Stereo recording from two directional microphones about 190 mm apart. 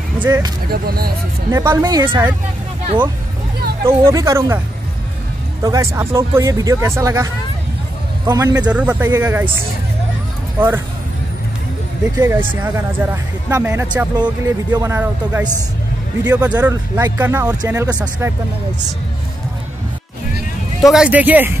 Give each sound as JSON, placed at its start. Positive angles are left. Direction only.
{"t": 0.2, "sound": "speech", "side_deg": -15}
{"t": 0.7, "sound": "speech", "side_deg": -55}
{"t": 1.5, "sound": "speech", "side_deg": -15}
{"t": 3.8, "sound": "speech", "side_deg": -15}
{"t": 5.6, "sound": "speech", "side_deg": -15}
{"t": 8.3, "sound": "a man's voice", "side_deg": -20}
{"t": 8.6, "sound": "speech", "side_deg": -5}
{"t": 12.2, "sound": "speech", "side_deg": -15}
{"t": 20.8, "sound": "speech", "side_deg": -5}